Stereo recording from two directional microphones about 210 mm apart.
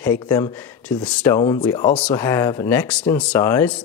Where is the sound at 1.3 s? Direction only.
20° left (ahead or behind).